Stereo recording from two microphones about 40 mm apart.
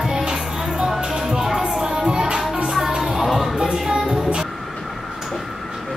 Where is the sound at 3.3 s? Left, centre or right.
Centre.